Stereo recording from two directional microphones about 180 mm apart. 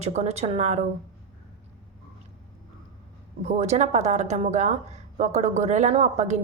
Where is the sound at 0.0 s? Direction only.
35° right (ahead or behind).